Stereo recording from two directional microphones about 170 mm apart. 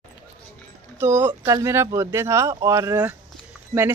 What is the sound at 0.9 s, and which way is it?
Speech, 15° right (ahead or behind).